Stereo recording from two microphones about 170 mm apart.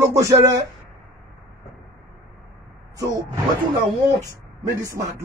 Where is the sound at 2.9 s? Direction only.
20° right (ahead or behind).